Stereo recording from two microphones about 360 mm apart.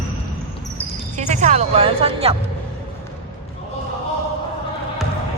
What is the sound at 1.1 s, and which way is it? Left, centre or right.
Music, centre.